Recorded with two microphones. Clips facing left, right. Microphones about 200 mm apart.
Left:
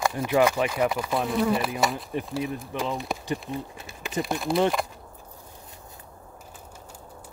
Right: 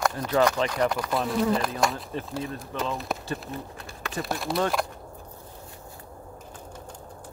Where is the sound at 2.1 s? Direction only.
15° left (ahead or behind).